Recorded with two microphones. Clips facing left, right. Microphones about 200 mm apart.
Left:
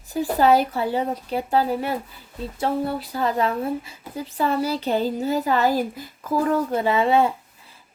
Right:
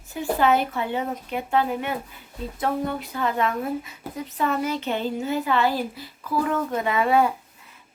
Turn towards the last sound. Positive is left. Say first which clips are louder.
# left 1 dB
turn(degrees=30)  # may be behind; listen again after turning